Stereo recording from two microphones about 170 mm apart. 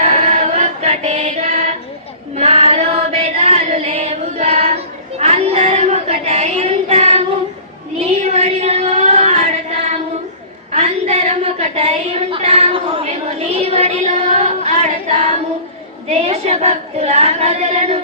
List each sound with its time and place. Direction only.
0.0 s choir: 40° right (ahead or behind)
2.3 s female singing: 40° right (ahead or behind)
10.7 s a sound: 40° right (ahead or behind)
13.7 s child singing: 40° right (ahead or behind)
16.0 s female singing: 40° right (ahead or behind)